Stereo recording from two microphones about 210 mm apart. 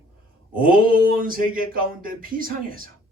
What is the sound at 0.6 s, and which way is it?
Speech, 40° right (ahead or behind).